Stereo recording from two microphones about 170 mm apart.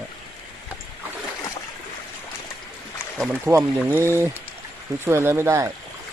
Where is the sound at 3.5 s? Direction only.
15° right (ahead or behind).